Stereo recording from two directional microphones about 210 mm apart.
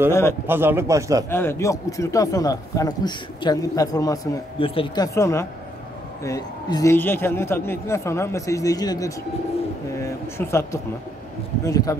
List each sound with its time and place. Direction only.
0.5 s a man's voice: 10° right (ahead or behind)
1.3 s speech: 10° left (ahead or behind)